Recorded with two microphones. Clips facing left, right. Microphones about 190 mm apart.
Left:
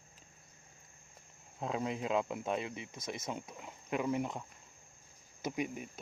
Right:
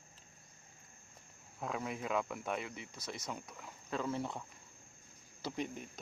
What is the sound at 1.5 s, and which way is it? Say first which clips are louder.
Speech: left 4 dB; 25° left (ahead or behind).